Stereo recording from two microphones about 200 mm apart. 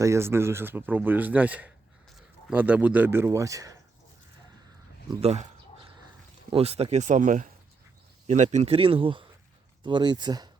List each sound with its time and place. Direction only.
0.0 s speech: 15° right (ahead or behind)
5.2 s speech: 30° right (ahead or behind)
6.5 s speech: 30° right (ahead or behind)